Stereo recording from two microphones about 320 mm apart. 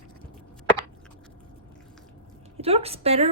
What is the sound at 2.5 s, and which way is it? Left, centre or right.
Speech, centre.